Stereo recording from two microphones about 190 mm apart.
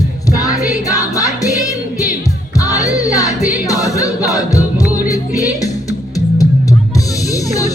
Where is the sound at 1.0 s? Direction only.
15° left (ahead or behind).